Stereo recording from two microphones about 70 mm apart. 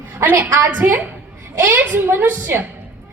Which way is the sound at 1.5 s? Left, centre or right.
Right.